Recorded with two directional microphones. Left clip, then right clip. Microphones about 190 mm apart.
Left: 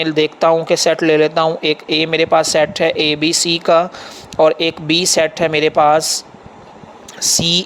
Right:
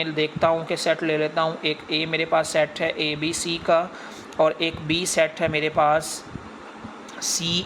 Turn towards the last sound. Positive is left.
turn(degrees=45)  # may be behind; listen again after turning